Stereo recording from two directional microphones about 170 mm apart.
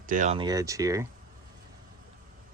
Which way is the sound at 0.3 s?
20° right (ahead or behind).